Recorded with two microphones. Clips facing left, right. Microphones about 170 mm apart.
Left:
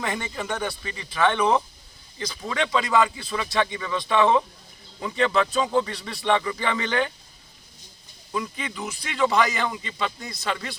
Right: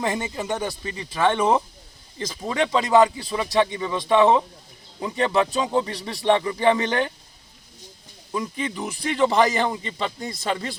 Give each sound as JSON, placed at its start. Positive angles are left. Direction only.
{"t": 0.0, "sound": "a man's voice", "side_deg": -20}
{"t": 0.6, "sound": "speech", "side_deg": -40}
{"t": 5.5, "sound": "a man's voice", "side_deg": -25}
{"t": 8.3, "sound": "a man's voice", "side_deg": -30}